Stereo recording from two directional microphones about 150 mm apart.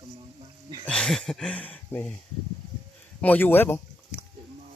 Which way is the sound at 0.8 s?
5° left (ahead or behind).